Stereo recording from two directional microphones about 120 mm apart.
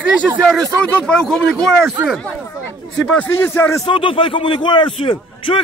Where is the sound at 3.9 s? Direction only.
45° left (ahead or behind).